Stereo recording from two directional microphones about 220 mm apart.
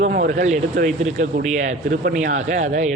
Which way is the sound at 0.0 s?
40° right (ahead or behind).